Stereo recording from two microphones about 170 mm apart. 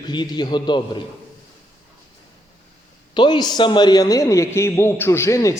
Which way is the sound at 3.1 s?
25° left (ahead or behind).